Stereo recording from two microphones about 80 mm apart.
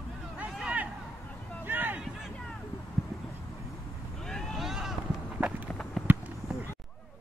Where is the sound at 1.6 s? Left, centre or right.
Right.